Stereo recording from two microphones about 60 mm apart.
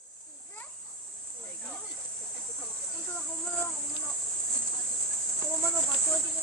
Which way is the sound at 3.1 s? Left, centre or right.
Left.